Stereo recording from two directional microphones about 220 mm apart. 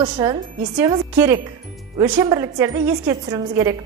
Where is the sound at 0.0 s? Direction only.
20° right (ahead or behind).